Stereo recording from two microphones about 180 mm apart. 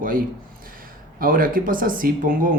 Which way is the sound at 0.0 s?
50° right (ahead or behind).